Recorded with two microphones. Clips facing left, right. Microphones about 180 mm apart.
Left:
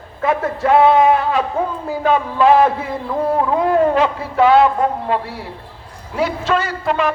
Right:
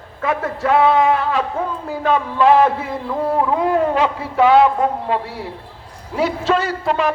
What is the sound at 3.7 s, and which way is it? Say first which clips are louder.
Speech: left 2 dB; 10° right (ahead or behind).